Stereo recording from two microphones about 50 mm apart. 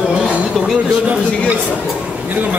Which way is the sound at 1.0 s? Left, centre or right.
Right.